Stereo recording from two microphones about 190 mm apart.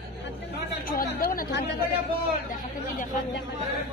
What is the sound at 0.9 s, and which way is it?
Chatter, 50° left (ahead or behind).